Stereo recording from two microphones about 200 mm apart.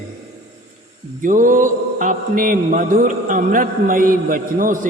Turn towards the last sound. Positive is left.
turn(degrees=-45)  # may be behind; listen again after turning